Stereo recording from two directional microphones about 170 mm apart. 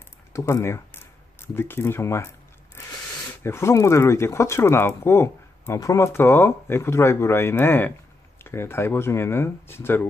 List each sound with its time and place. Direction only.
0.3 s speech: 20° left (ahead or behind)